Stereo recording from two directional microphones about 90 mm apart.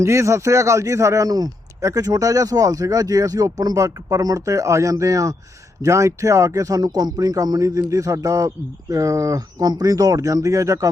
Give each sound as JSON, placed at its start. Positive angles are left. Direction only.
{"t": 0.0, "sound": "a man's voice", "side_deg": -35}